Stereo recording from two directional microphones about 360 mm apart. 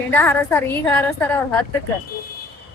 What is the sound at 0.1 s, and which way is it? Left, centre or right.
A woman's voice, centre.